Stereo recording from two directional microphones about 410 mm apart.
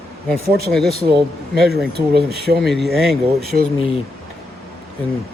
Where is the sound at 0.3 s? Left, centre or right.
Centre.